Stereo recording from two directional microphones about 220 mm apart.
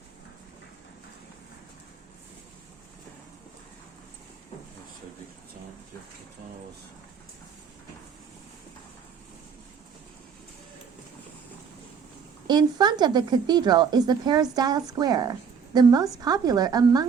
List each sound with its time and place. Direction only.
12.5 s a woman's voice: 20° right (ahead or behind)